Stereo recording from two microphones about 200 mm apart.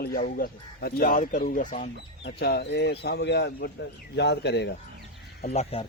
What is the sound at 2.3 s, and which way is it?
Speech, 55° left (ahead or behind).